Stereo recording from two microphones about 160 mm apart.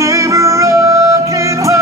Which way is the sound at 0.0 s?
20° right (ahead or behind).